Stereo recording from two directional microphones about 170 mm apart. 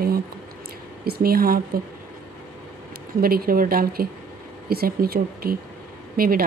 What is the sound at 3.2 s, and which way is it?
A woman's voice, 60° right (ahead or behind).